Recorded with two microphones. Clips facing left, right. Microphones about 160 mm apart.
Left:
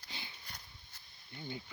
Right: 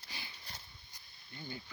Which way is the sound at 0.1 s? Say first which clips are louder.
Left 1 dB; 20° left (ahead or behind).